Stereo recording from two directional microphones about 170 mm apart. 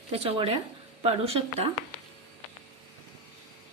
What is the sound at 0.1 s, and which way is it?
A woman's voice, 35° right (ahead or behind).